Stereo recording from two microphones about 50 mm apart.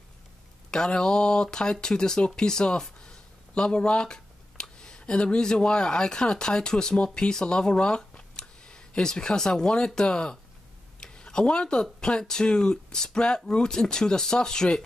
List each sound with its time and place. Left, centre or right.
0.7 s speech: centre